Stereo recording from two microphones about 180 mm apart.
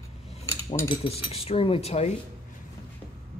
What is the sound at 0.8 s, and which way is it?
Speech, 30° left (ahead or behind).